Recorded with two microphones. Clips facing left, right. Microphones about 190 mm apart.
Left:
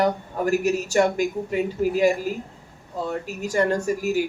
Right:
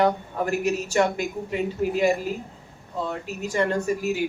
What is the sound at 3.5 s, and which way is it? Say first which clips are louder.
Speech: left 2 dB; 40° left (ahead or behind).